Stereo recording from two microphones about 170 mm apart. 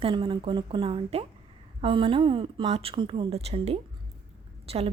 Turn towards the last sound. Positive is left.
turn(degrees=-35)  # may be behind; listen again after turning